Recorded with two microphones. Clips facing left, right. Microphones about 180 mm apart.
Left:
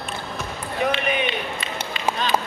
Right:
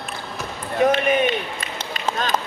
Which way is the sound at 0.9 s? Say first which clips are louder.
Right 4 dB; 45° right (ahead or behind).